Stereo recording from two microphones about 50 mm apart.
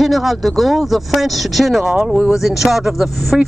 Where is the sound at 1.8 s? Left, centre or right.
Centre.